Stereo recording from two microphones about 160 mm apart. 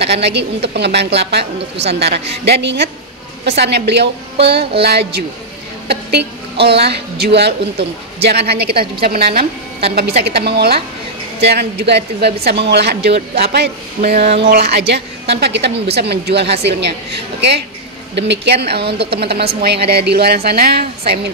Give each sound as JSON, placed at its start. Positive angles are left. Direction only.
{"t": 0.0, "sound": "a woman's voice", "side_deg": -90}
{"t": 9.9, "sound": "a woman's voice", "side_deg": -90}
{"t": 14.2, "sound": "speech", "side_deg": -40}
{"t": 14.5, "sound": "a woman's voice", "side_deg": -90}
{"t": 20.4, "sound": "a woman's voice", "side_deg": -80}